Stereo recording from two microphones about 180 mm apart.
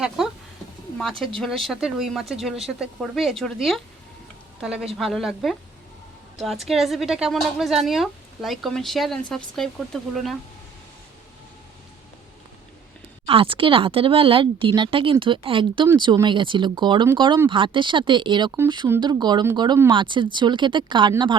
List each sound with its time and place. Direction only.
0.2 s speech: centre (ahead or behind)
1.4 s a woman's voice: centre (ahead or behind)
13.2 s speech: 30° right (ahead or behind)